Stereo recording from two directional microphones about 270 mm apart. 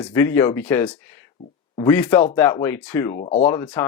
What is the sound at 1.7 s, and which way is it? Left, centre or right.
Speech, centre.